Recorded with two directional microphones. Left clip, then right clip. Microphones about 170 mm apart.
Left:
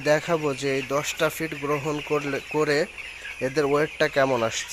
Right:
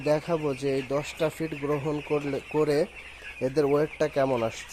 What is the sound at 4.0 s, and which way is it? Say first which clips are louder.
Speech: left 4 dB; 5° right (ahead or behind).